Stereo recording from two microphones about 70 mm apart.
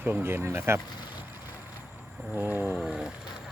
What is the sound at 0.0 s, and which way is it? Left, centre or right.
Speech, right.